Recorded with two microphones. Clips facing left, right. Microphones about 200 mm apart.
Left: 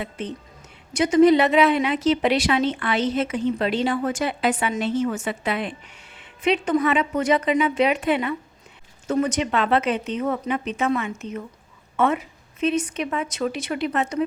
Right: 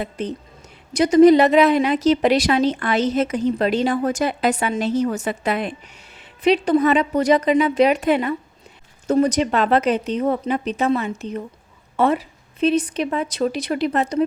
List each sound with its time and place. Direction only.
0.0 s a woman's voice: 40° right (ahead or behind)